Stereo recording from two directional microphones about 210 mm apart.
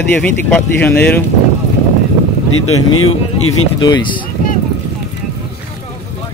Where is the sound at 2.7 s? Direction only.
90° left.